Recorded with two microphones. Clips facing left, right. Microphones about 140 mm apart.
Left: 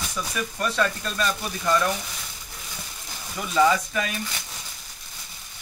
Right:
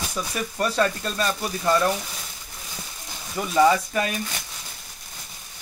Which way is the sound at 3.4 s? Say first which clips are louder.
Right 2 dB; 25° right (ahead or behind).